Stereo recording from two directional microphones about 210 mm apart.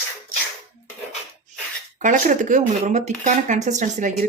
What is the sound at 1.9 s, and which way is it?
Speech, 40° right (ahead or behind).